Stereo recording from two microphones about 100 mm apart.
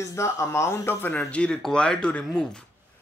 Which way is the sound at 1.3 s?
10° left (ahead or behind).